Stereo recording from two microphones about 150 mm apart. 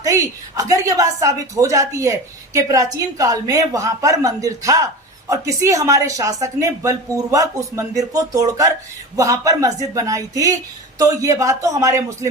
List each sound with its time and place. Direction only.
0.0 s a woman's voice: 20° right (ahead or behind)